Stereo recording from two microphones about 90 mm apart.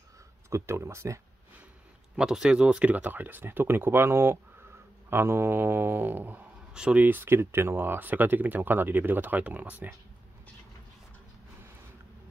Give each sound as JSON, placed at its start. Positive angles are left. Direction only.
{"t": 0.5, "sound": "speech", "side_deg": -30}
{"t": 2.1, "sound": "speech", "side_deg": -5}
{"t": 6.7, "sound": "speech", "side_deg": -10}